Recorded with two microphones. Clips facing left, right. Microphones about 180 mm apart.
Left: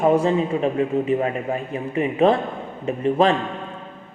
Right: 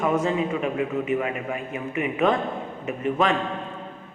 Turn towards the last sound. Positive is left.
turn(degrees=30)  # may be behind; listen again after turning